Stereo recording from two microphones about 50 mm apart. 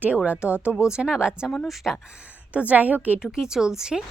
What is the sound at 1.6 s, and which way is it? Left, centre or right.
Speech, centre.